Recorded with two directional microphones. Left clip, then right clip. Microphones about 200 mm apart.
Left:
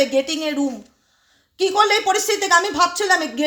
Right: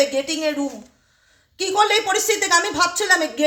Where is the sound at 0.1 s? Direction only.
35° left (ahead or behind).